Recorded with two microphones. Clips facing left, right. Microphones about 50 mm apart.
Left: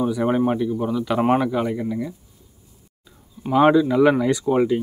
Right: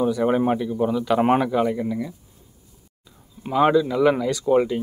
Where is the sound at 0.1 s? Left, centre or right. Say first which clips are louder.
Right 1 dB; centre.